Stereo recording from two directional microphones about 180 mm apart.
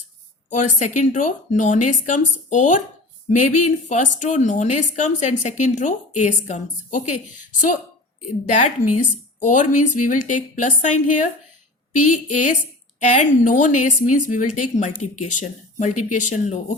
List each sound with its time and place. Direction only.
0.5 s a woman's voice: 45° left (ahead or behind)
8.4 s a woman's voice: 40° left (ahead or behind)